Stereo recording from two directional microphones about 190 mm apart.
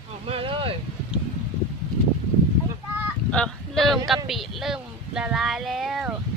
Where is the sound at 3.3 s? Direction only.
5° left (ahead or behind).